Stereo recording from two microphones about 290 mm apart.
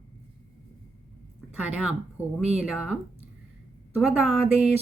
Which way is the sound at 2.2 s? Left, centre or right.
Centre.